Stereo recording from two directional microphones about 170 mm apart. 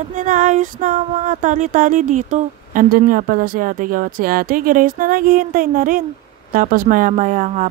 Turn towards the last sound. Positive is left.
turn(degrees=-45)  # may be behind; listen again after turning